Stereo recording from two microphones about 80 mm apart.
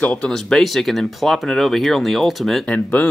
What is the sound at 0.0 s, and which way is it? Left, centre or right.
Speech, centre.